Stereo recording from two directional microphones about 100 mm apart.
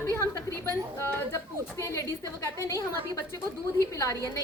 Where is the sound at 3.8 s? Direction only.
30° left (ahead or behind).